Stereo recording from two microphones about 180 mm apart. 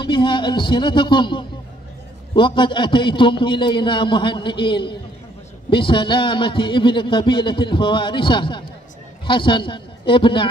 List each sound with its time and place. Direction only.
0.0 s a man's voice: 25° left (ahead or behind)